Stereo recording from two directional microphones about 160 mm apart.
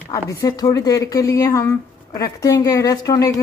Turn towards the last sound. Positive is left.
turn(degrees=20)  # may be behind; listen again after turning